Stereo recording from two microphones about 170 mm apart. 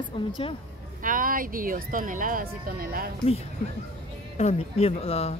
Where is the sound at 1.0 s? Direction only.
55° right (ahead or behind).